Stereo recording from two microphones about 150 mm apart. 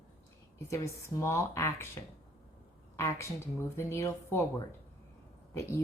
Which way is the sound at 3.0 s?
20° left (ahead or behind).